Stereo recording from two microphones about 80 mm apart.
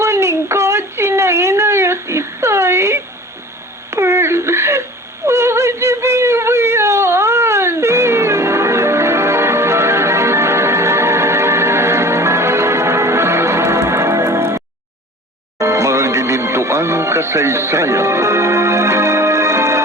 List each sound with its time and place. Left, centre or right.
0.0 s a sound: right
5.2 s whimper: right
15.5 s music: right